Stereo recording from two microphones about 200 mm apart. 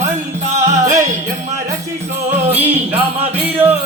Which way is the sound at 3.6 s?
10° right (ahead or behind).